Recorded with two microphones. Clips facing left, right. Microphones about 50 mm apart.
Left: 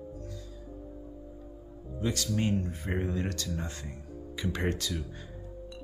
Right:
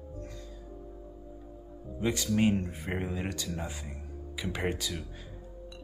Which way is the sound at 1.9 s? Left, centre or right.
Centre.